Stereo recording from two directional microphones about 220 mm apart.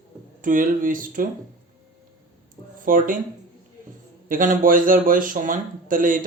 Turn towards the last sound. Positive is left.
turn(degrees=-40)  # may be behind; listen again after turning